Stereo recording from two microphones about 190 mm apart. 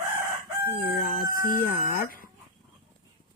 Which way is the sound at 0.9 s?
50° left (ahead or behind).